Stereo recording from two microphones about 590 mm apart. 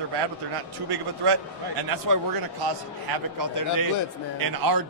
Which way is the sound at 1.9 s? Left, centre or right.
Right.